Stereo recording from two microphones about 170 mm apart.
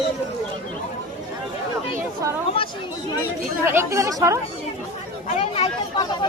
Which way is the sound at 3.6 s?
15° right (ahead or behind).